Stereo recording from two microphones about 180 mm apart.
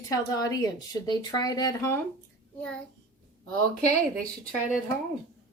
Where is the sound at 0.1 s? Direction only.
20° left (ahead or behind).